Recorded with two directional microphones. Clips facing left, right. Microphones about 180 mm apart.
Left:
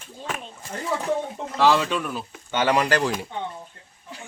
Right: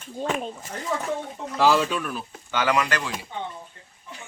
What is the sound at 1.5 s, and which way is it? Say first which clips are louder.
Speech: left 1 dB; 10° right (ahead or behind).